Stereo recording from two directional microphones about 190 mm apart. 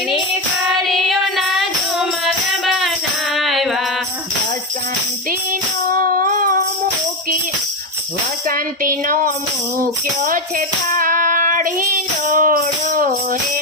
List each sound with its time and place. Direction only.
0.9 s music: centre (ahead or behind)
5.9 s music: 50° right (ahead or behind)
8.4 s a woman's voice: 50° right (ahead or behind)
9.7 s music: 45° right (ahead or behind)
10.9 s female singing: 45° right (ahead or behind)
12.3 s music: 45° right (ahead or behind)